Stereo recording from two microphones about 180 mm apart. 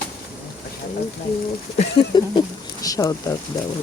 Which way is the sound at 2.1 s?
25° left (ahead or behind).